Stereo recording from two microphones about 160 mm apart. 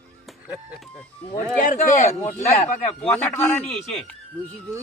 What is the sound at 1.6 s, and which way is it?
A man's voice, 55° left (ahead or behind).